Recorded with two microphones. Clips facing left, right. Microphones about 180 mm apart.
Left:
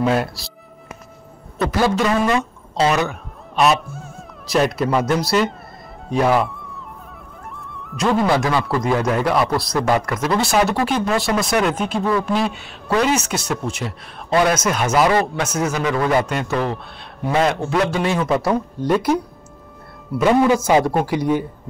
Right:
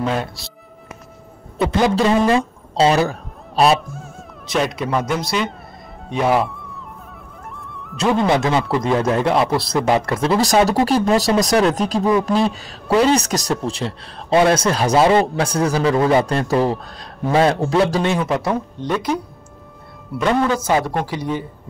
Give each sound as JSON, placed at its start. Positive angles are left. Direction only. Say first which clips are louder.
{"t": 0.0, "sound": "speech", "louder": "left 3 dB", "side_deg": 5}
{"t": 1.7, "sound": "a man's voice", "louder": "right 2 dB", "side_deg": -25}
{"t": 4.0, "sound": "music", "louder": "even", "side_deg": 0}
{"t": 4.8, "sound": "speech", "louder": "left 2 dB", "side_deg": 0}
{"t": 6.0, "sound": "music", "louder": "left 1 dB", "side_deg": 0}
{"t": 8.3, "sound": "speech", "louder": "right 1 dB", "side_deg": -20}
{"t": 12.0, "sound": "speech", "louder": "right 3 dB", "side_deg": -15}
{"t": 12.5, "sound": "speech", "louder": "right 3 dB", "side_deg": -35}
{"t": 16.3, "sound": "speech", "louder": "right 4 dB", "side_deg": -35}
{"t": 18.2, "sound": "speech", "louder": "left 2 dB", "side_deg": 0}
{"t": 20.2, "sound": "speech", "louder": "left 3 dB", "side_deg": 10}